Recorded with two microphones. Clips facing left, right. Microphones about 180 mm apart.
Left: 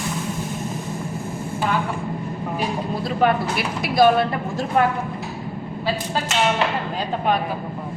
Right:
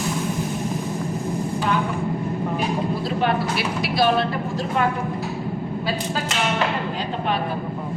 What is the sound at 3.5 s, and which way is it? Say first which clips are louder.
Speech: left 2 dB; 50° left (ahead or behind).